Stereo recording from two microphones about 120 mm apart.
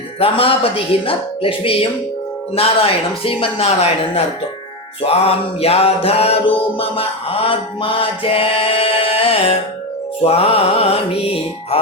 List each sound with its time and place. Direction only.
0.2 s music: 50° left (ahead or behind)